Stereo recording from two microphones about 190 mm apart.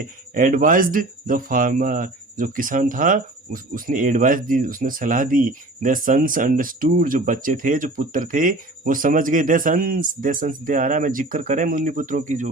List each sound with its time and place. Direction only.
0.0 s speech: 45° right (ahead or behind)